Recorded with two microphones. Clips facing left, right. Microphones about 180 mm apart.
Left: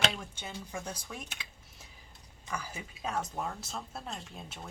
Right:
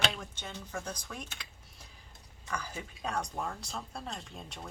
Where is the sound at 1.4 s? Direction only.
Centre (ahead or behind).